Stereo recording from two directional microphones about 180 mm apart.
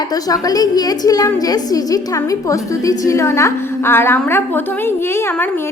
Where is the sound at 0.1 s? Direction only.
20° left (ahead or behind).